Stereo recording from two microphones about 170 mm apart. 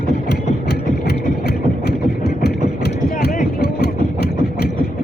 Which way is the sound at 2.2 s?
70° left (ahead or behind).